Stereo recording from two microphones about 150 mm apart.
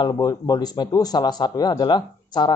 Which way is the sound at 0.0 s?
25° left (ahead or behind).